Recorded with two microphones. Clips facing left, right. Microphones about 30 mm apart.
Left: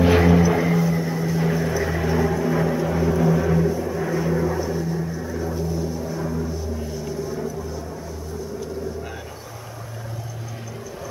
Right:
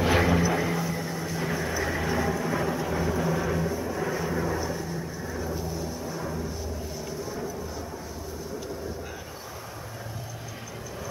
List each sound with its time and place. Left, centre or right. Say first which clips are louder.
0.0 s vehicle: left 6 dB; centre